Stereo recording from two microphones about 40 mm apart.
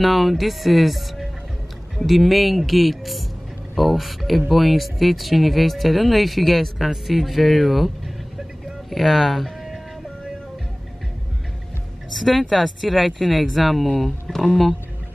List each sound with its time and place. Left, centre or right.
0.0 s speech: centre
8.9 s speech: centre
12.1 s speech: centre